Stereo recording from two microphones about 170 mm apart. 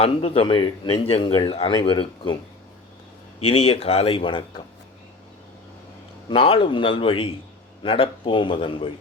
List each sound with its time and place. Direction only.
0.0 s speech: 35° left (ahead or behind)
3.4 s speech: 35° left (ahead or behind)
6.2 s speech: 35° left (ahead or behind)